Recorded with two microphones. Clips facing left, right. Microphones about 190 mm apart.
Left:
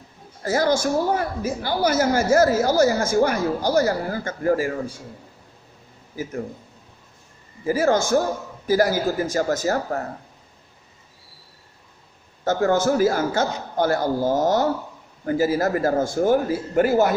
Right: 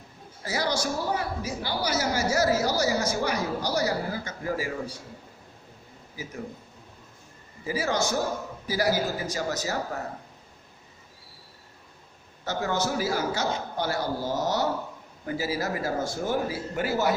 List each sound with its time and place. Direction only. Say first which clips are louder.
0.4 s a woman's voice: left 8 dB; 50° left (ahead or behind)
6.2 s a woman's voice: left 9 dB; 50° left (ahead or behind)
7.7 s a woman's voice: left 8 dB; 50° left (ahead or behind)
12.5 s a woman's voice: left 9 dB; 50° left (ahead or behind)